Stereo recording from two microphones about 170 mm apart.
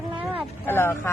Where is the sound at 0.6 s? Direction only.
15° left (ahead or behind).